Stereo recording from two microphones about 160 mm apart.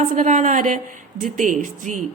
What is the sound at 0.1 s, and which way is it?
A woman's voice, 50° right (ahead or behind).